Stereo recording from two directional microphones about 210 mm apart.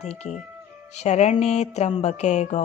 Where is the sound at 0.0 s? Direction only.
30° left (ahead or behind).